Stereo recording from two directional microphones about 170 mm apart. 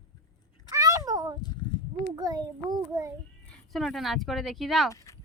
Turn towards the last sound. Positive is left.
turn(degrees=20)  # may be behind; listen again after turning